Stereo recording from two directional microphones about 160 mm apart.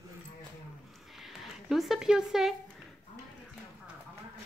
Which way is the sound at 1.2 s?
Centre (ahead or behind).